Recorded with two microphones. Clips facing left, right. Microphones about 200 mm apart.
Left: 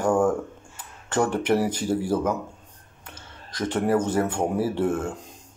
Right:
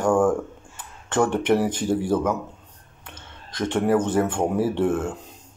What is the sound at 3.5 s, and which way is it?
Speech, 35° left (ahead or behind).